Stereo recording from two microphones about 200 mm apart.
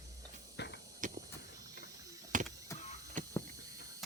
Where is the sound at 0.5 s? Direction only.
55° left (ahead or behind).